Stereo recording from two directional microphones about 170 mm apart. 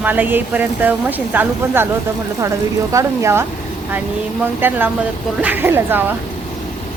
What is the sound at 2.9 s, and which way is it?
Speech, 15° right (ahead or behind).